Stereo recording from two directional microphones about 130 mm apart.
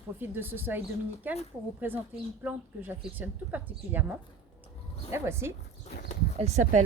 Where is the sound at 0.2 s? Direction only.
15° right (ahead or behind).